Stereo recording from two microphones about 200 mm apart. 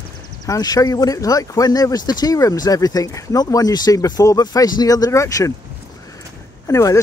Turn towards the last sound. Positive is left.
turn(degrees=15)  # may be behind; listen again after turning